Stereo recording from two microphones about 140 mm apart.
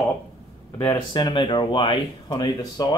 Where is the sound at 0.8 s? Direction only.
30° left (ahead or behind).